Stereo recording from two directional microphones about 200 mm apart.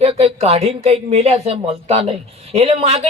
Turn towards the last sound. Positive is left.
turn(degrees=-30)  # may be behind; listen again after turning